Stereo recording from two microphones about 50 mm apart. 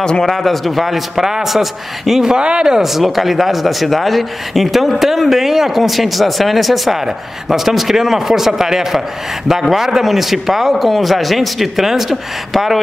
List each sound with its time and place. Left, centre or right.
0.0 s a man's voice: centre
0.3 s speech: centre
2.3 s speech: centre